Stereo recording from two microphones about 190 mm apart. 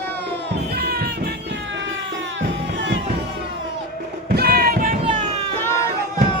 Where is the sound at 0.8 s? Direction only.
55° right (ahead or behind).